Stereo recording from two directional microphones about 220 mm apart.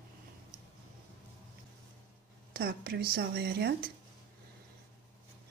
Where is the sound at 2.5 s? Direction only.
45° right (ahead or behind).